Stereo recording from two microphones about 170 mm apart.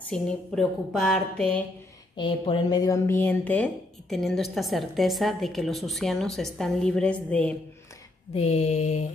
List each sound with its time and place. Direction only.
0.1 s speech: centre (ahead or behind)
2.1 s speech: 30° left (ahead or behind); by 7.5 s 10° left (ahead or behind)
8.4 s mantra: 40° left (ahead or behind)